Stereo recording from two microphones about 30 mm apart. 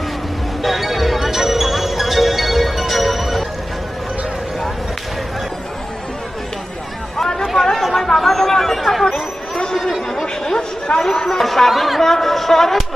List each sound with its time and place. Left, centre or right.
0.6 s music: centre
7.4 s chatter: centre
8.2 s a sound: centre
9.1 s chatter: left
10.8 s speech: left